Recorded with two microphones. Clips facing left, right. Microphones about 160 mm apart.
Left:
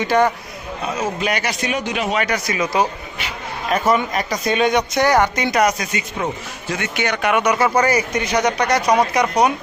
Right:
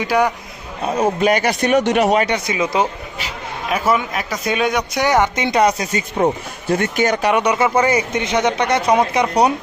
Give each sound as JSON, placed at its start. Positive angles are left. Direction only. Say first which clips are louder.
{"t": 0.0, "sound": "a man's voice", "louder": "left 1 dB", "side_deg": -10}
{"t": 0.9, "sound": "a man's voice", "louder": "right 6 dB", "side_deg": -35}
{"t": 1.8, "sound": "speech", "louder": "right 7 dB", "side_deg": -70}
{"t": 2.1, "sound": "speech", "louder": "right 3 dB", "side_deg": -25}
{"t": 3.7, "sound": "a man's voice", "louder": "left 1 dB", "side_deg": -5}
{"t": 7.3, "sound": "speech", "louder": "right 1 dB", "side_deg": -30}